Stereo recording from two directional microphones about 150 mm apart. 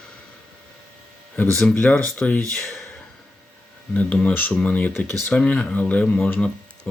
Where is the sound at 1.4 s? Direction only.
5° left (ahead or behind).